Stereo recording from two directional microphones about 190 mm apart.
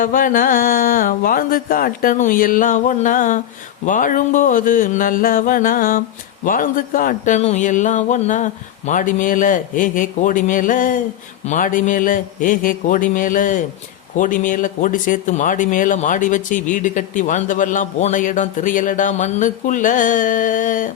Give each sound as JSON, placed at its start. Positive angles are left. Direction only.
{"t": 0.0, "sound": "speech", "side_deg": 45}